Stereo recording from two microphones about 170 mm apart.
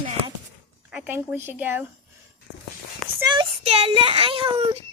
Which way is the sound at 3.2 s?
25° right (ahead or behind).